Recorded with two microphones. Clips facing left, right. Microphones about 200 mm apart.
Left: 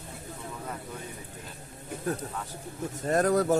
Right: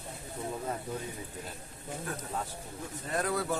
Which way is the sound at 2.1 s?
40° left (ahead or behind).